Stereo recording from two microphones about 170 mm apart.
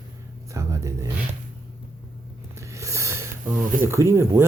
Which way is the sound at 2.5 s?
15° right (ahead or behind).